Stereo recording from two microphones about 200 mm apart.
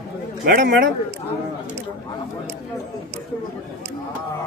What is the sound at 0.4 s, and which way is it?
Speech, 50° right (ahead or behind).